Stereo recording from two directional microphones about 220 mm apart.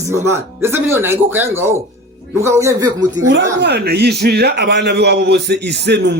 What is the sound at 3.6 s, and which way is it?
A man's voice, 45° right (ahead or behind).